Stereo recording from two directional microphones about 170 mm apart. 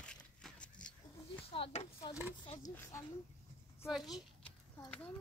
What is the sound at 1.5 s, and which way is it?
Speech, 35° left (ahead or behind).